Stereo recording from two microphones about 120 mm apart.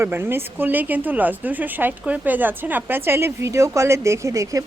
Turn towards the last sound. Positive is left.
turn(degrees=-25)  # may be behind; listen again after turning